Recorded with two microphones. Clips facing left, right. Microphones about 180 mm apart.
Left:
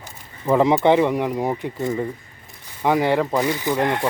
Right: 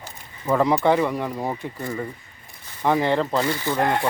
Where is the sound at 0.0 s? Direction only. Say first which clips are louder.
Left 3 dB; 20° left (ahead or behind).